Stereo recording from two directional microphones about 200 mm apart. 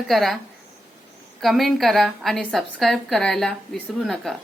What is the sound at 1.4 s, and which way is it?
A woman's voice, centre (ahead or behind).